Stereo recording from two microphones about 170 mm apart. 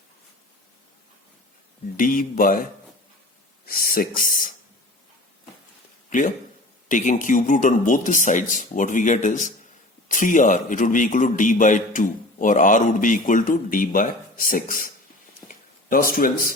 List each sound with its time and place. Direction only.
2.0 s a man's voice: 55° left (ahead or behind)
3.7 s speech: 60° left (ahead or behind)
6.1 s a man's voice: 50° left (ahead or behind)
15.4 s a sound: 55° left (ahead or behind)